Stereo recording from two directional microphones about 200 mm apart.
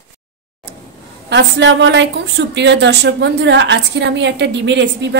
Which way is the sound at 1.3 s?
65° right (ahead or behind).